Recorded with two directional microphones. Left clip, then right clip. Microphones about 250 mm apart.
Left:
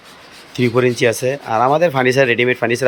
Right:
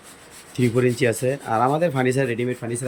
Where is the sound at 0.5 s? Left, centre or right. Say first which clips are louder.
Left 6 dB; centre.